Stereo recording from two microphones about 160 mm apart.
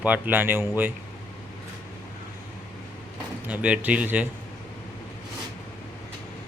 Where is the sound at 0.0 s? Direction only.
10° right (ahead or behind).